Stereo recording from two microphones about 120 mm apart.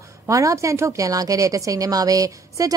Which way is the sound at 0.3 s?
25° right (ahead or behind).